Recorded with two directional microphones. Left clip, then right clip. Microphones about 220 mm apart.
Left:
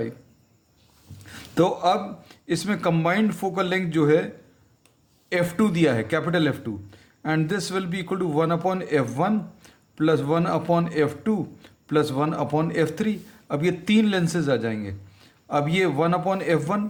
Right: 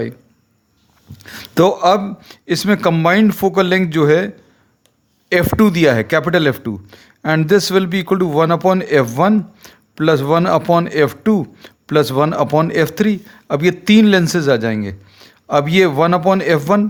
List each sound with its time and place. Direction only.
1.2 s speech: 40° right (ahead or behind)
5.3 s speech: 40° right (ahead or behind)